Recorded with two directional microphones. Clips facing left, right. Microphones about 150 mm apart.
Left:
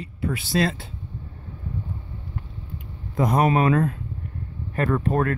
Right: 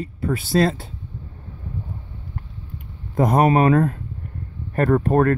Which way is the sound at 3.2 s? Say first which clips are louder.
Right 4 dB; 45° right (ahead or behind).